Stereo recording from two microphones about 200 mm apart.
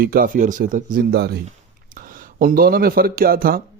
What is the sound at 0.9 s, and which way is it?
A man's voice, 55° right (ahead or behind).